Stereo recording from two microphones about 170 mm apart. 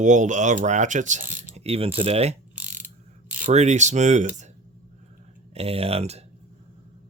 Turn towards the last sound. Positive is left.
turn(degrees=-35)  # may be behind; listen again after turning